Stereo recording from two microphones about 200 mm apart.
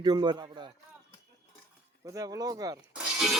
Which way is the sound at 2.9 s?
Centre (ahead or behind).